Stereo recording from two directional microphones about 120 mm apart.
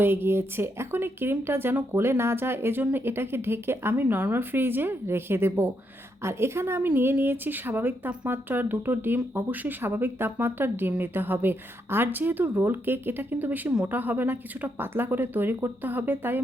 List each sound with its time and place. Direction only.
0.0 s a woman's voice: 20° right (ahead or behind)